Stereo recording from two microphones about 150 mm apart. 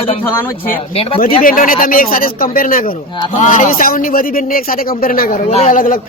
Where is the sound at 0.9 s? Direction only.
40° left (ahead or behind).